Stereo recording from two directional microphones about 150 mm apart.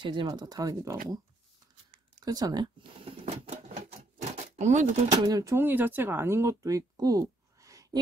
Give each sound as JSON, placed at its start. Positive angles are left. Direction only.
{"t": 0.0, "sound": "speech", "side_deg": -30}
{"t": 2.2, "sound": "speech", "side_deg": -25}
{"t": 3.4, "sound": "typewriter", "side_deg": -50}
{"t": 4.2, "sound": "a sound", "side_deg": -50}
{"t": 5.2, "sound": "speech", "side_deg": -20}